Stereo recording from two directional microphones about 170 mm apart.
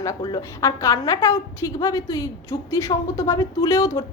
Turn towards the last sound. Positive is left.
turn(degrees=20)  # may be behind; listen again after turning